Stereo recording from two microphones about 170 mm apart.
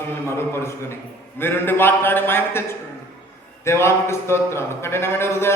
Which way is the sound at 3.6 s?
15° left (ahead or behind).